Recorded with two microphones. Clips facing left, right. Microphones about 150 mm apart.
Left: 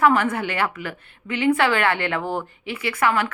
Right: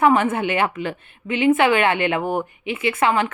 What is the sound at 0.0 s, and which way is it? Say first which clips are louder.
A woman's voice: right 2 dB; 20° right (ahead or behind).